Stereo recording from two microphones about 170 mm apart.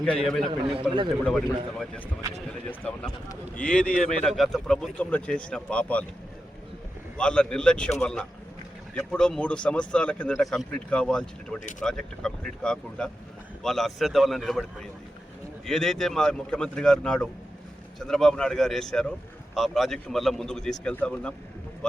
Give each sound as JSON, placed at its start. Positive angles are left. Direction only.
{"t": 0.0, "sound": "speech", "side_deg": 5}
{"t": 0.6, "sound": "a man's voice", "side_deg": -35}
{"t": 2.6, "sound": "speech", "side_deg": 5}
{"t": 7.2, "sound": "speech", "side_deg": 5}